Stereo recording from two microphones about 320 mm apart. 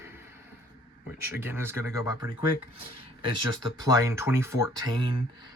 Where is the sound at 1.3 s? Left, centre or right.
Centre.